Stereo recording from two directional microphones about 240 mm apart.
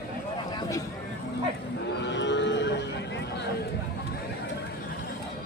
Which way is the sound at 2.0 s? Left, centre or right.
Left.